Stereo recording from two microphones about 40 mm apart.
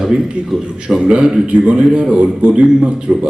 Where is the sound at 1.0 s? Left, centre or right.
Right.